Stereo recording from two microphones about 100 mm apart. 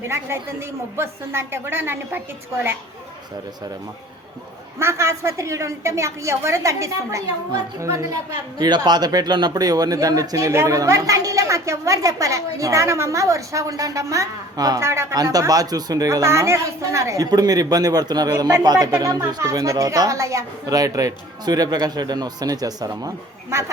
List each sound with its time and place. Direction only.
0.9 s a woman's voice: 25° right (ahead or behind)
4.8 s a woman's voice: 25° right (ahead or behind)
14.8 s speech: 25° right (ahead or behind); by 18.3 s 45° right (ahead or behind)
18.3 s speech: 30° right (ahead or behind)